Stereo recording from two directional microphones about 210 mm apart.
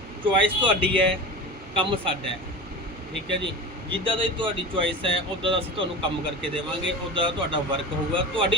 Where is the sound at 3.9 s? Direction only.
25° right (ahead or behind).